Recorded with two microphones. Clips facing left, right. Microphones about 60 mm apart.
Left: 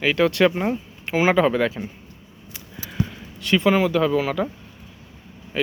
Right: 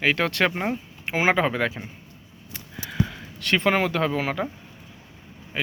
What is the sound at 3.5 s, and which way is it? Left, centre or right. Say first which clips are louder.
Speech: left 3 dB; right.